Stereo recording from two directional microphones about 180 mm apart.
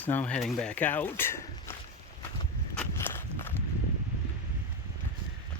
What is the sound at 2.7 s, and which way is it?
Walk, 10° left (ahead or behind).